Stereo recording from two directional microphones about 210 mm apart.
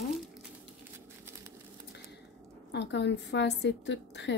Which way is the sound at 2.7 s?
55° left (ahead or behind).